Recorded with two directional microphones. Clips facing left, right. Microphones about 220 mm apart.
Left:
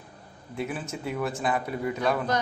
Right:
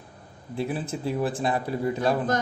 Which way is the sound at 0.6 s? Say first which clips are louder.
Right 3 dB; 30° right (ahead or behind).